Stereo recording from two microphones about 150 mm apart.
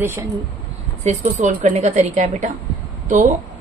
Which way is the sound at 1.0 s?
55° right (ahead or behind).